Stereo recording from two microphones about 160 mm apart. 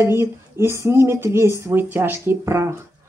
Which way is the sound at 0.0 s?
15° right (ahead or behind).